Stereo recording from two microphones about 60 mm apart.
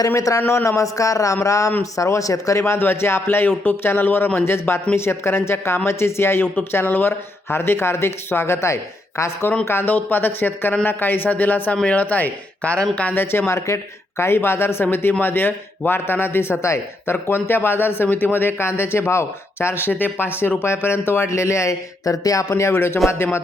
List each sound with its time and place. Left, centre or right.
0.3 s a man's voice: left
9.6 s a man's voice: left
13.3 s a man's voice: left
22.0 s a man's voice: left